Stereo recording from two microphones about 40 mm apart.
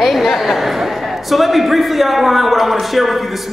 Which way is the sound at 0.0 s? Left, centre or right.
Centre.